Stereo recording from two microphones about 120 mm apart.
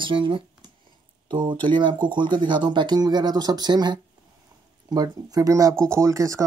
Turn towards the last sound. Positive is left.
turn(degrees=-25)  # may be behind; listen again after turning